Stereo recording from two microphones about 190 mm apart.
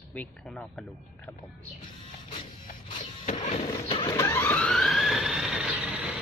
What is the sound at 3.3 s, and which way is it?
Vehicle, 30° left (ahead or behind).